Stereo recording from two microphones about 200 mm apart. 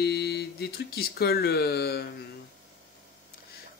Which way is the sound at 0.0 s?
55° left (ahead or behind).